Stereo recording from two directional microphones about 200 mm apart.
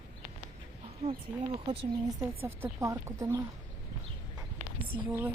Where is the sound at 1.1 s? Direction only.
25° right (ahead or behind).